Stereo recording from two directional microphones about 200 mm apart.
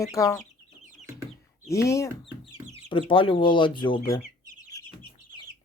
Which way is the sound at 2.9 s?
25° left (ahead or behind).